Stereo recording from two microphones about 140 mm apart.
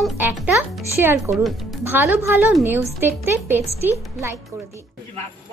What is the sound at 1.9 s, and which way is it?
Speech, 15° right (ahead or behind).